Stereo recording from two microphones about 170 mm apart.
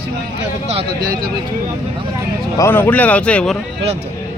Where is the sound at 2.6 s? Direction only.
10° left (ahead or behind).